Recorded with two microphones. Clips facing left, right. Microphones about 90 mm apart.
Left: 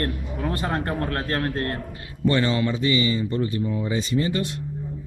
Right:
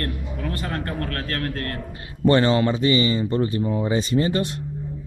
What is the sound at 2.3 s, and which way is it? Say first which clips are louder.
Speech: right 4 dB; 50° right (ahead or behind).